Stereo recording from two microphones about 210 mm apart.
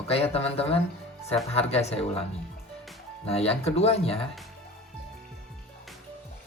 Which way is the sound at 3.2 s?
30° left (ahead or behind).